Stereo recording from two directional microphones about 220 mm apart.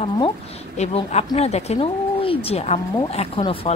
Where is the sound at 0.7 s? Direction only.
30° left (ahead or behind).